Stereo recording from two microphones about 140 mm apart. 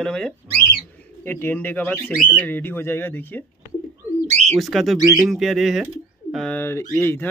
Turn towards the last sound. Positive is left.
turn(degrees=15)  # may be behind; listen again after turning